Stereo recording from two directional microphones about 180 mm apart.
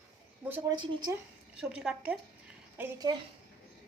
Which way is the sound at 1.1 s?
15° right (ahead or behind).